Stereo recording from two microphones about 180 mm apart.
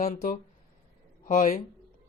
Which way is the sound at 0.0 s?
45° left (ahead or behind).